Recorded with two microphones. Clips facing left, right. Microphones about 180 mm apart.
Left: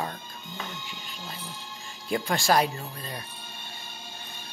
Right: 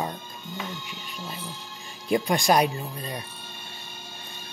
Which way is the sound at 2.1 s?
15° right (ahead or behind).